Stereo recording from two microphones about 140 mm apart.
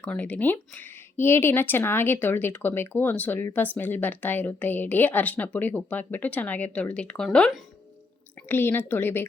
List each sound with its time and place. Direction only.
0.0 s speech: 10° left (ahead or behind)
8.4 s speech: 15° left (ahead or behind)